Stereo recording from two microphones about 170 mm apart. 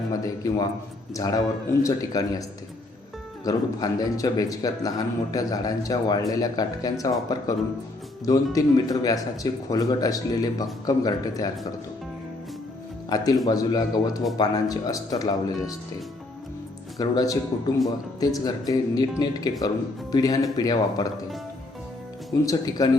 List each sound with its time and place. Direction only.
0.1 s a man's voice: 20° left (ahead or behind)
3.4 s speech: 20° left (ahead or behind)
13.1 s speech: 20° left (ahead or behind)
17.0 s speech: 20° left (ahead or behind)
22.3 s speech: 20° left (ahead or behind)